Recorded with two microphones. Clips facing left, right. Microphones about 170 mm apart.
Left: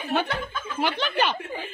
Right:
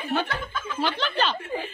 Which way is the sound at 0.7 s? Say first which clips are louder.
Left 1 dB; 10° left (ahead or behind).